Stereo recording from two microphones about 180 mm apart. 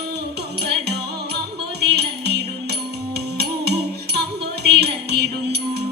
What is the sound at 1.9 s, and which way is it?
Music, 65° right (ahead or behind).